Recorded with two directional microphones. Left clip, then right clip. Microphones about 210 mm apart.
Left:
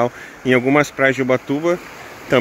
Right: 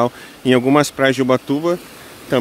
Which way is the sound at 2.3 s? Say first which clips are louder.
Left 2 dB; 5° right (ahead or behind).